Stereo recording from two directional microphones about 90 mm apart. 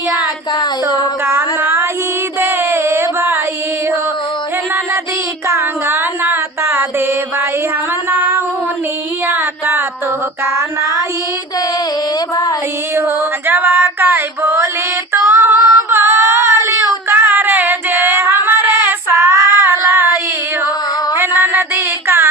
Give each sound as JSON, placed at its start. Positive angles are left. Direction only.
{"t": 1.2, "sound": "music", "side_deg": -25}
{"t": 2.4, "sound": "a sound", "side_deg": -25}
{"t": 5.5, "sound": "a sound", "side_deg": -25}
{"t": 8.1, "sound": "female singing", "side_deg": -25}
{"t": 9.2, "sound": "music", "side_deg": -20}
{"t": 13.0, "sound": "female singing", "side_deg": -25}
{"t": 21.2, "sound": "mantra", "side_deg": -25}